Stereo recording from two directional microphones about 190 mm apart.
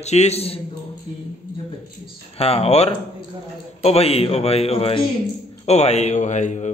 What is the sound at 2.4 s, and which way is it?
A man's voice, 30° left (ahead or behind).